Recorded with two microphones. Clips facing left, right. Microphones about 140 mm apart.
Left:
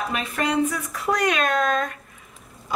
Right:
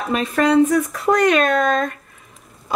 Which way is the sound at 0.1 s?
40° right (ahead or behind).